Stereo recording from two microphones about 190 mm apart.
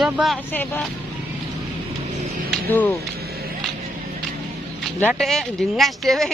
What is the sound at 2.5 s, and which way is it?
Music, 10° left (ahead or behind).